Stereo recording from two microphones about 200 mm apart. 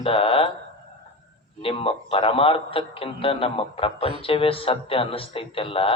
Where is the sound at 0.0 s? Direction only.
30° left (ahead or behind).